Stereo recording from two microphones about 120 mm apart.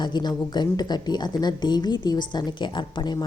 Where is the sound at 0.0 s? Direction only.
35° left (ahead or behind).